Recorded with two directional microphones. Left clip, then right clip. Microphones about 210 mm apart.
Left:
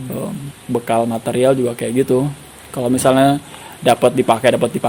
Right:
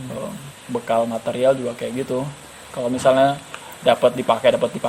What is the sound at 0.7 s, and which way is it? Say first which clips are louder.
Speech: left 3 dB; 50° left (ahead or behind).